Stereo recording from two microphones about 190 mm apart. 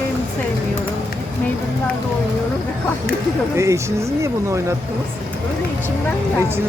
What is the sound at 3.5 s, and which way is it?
Speech, 15° right (ahead or behind).